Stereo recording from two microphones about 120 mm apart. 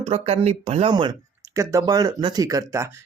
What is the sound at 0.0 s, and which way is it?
Speech, 60° right (ahead or behind).